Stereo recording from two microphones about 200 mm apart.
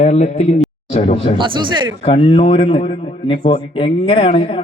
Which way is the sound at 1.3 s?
25° right (ahead or behind).